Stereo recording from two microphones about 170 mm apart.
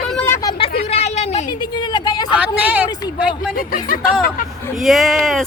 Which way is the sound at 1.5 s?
25° left (ahead or behind).